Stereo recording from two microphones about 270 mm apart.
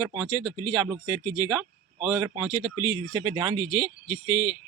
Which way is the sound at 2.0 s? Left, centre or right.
Centre.